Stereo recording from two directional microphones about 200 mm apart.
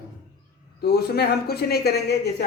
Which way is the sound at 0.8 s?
50° left (ahead or behind).